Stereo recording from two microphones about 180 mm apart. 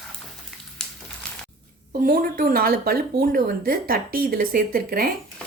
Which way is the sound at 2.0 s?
50° right (ahead or behind).